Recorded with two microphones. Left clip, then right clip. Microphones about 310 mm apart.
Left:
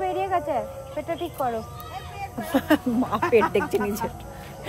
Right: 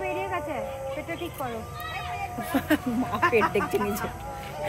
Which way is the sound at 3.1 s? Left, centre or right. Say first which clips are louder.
Left 2 dB; left.